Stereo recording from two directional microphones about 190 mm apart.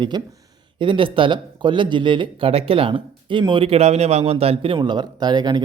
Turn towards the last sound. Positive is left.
turn(degrees=-20)  # may be behind; listen again after turning